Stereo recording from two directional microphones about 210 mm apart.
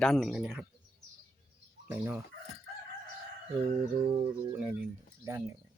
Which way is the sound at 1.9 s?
10° right (ahead or behind).